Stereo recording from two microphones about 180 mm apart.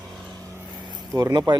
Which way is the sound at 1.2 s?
25° right (ahead or behind).